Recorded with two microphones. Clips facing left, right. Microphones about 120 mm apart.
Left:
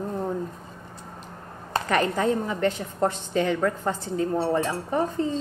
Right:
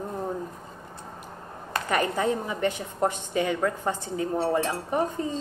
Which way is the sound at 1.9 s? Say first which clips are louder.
Left 2 dB; 15° right (ahead or behind).